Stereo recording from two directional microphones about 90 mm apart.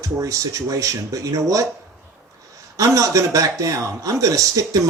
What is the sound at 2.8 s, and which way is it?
Speech, 40° right (ahead or behind).